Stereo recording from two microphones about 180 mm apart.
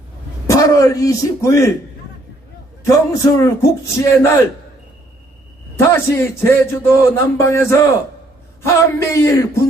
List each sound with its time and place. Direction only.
0.4 s speech: 20° left (ahead or behind)
2.8 s a man's voice: 15° left (ahead or behind)
5.9 s a man's voice: 15° left (ahead or behind)